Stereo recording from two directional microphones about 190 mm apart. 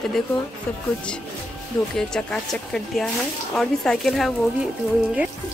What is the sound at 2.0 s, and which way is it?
A woman's voice, 5° left (ahead or behind).